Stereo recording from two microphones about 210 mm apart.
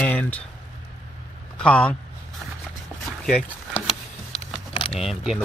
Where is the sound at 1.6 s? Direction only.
5° left (ahead or behind).